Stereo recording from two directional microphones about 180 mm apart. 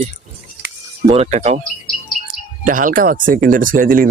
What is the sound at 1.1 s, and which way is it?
Speech, 35° right (ahead or behind).